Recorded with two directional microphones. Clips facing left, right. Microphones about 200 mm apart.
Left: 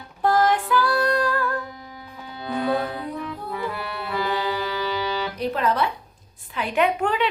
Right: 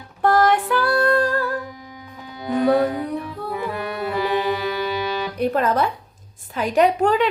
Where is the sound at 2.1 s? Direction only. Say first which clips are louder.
Right 5 dB; 15° right (ahead or behind).